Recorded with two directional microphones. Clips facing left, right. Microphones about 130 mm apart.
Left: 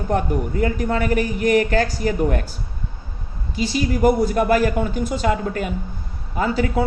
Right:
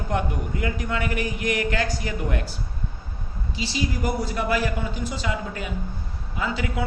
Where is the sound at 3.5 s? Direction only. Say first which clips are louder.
Left 6 dB; 50° left (ahead or behind).